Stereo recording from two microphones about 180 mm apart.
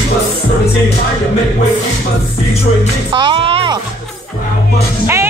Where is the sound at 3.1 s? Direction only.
25° right (ahead or behind).